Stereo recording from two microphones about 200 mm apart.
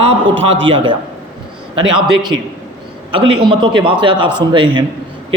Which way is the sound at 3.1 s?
25° right (ahead or behind).